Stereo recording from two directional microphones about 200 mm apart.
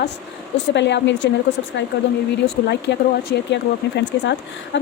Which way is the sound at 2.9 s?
60° left (ahead or behind).